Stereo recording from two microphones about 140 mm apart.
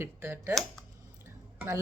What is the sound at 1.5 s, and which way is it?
Speech, 15° right (ahead or behind).